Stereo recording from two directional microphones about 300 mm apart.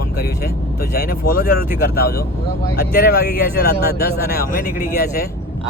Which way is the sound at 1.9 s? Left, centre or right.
Left.